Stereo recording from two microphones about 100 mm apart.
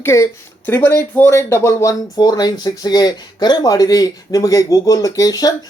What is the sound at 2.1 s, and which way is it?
Speech, 40° left (ahead or behind).